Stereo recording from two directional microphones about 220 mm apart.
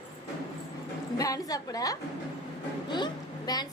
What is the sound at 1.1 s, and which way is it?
A woman's voice, 15° left (ahead or behind).